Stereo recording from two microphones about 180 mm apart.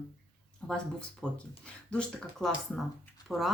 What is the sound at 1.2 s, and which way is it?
Speech, 5° left (ahead or behind).